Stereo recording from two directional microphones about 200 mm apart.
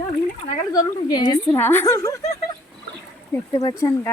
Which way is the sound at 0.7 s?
20° left (ahead or behind).